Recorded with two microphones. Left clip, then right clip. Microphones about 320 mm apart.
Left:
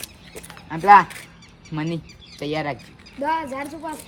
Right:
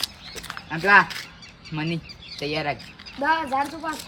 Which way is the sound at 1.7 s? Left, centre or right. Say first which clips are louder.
Left 1 dB; left.